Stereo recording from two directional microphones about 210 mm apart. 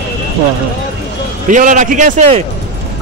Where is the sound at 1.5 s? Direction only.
35° right (ahead or behind).